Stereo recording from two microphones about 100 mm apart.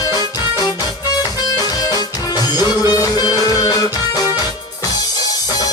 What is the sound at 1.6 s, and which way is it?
Music, 40° left (ahead or behind).